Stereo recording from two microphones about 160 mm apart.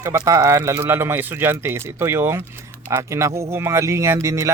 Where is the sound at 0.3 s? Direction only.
20° right (ahead or behind).